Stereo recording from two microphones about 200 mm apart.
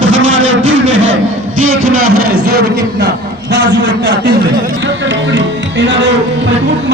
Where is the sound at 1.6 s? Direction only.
90° right.